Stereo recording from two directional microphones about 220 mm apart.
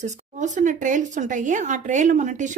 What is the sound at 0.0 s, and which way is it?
Speech, 35° right (ahead or behind).